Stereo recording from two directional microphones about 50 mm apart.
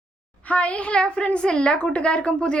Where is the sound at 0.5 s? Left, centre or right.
Left.